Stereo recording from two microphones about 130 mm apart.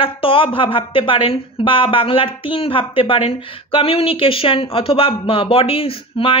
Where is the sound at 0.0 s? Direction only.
40° left (ahead or behind).